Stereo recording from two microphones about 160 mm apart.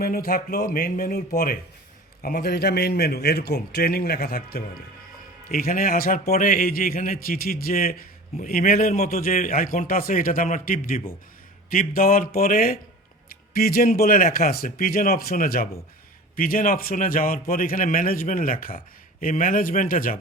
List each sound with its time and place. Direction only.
0.0 s a man's voice: 70° left (ahead or behind)
5.5 s a man's voice: 60° left (ahead or behind)